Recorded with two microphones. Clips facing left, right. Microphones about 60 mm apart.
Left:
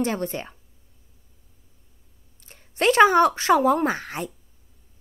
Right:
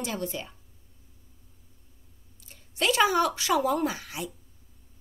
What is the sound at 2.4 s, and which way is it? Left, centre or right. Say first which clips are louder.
Speech: left 5 dB; left.